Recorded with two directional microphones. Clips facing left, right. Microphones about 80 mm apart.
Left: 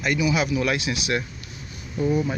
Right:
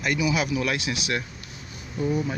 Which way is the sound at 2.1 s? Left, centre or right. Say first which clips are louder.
Left 3 dB; left.